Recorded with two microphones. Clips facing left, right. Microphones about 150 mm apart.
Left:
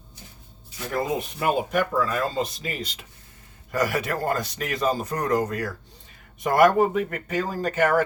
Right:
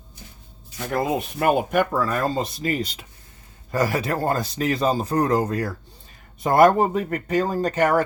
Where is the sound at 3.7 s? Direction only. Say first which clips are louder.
Right 2 dB; 30° right (ahead or behind).